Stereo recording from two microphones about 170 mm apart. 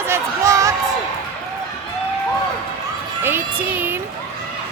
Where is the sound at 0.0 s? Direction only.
15° right (ahead or behind).